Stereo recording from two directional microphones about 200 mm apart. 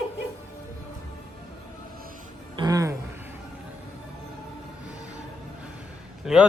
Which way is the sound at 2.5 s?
20° right (ahead or behind).